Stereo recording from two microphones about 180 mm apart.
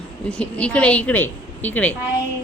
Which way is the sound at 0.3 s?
5° left (ahead or behind).